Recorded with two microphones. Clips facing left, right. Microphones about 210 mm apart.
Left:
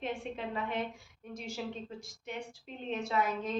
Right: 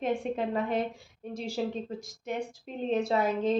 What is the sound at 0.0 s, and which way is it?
A woman's voice, 45° right (ahead or behind).